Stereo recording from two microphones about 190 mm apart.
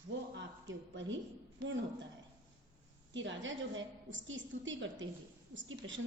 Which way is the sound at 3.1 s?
75° right (ahead or behind).